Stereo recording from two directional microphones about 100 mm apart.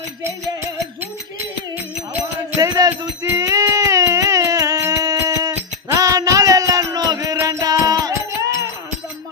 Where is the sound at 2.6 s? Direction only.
35° right (ahead or behind).